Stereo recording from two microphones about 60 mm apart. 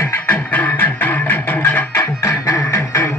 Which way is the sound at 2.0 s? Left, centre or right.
Left.